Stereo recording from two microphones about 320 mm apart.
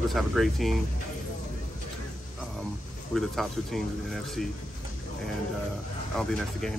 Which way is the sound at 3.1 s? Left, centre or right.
Centre.